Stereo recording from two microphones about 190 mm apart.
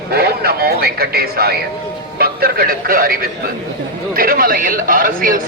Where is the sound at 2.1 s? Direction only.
55° right (ahead or behind).